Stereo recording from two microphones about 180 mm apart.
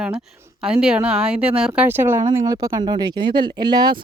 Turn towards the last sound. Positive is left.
turn(degrees=-25)  # may be behind; listen again after turning